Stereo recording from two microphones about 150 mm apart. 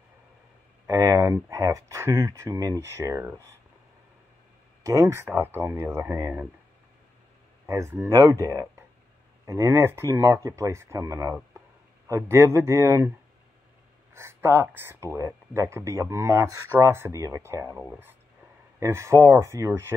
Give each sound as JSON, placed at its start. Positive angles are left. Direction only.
{"t": 0.8, "sound": "speech", "side_deg": -20}
{"t": 4.8, "sound": "speech", "side_deg": -20}
{"t": 7.6, "sound": "speech", "side_deg": -20}
{"t": 14.1, "sound": "speech", "side_deg": -15}